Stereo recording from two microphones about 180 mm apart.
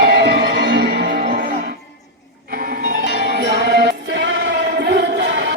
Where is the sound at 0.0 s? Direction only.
65° right (ahead or behind).